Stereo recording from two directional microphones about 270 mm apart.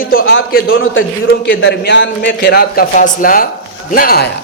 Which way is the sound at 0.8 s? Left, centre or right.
Left.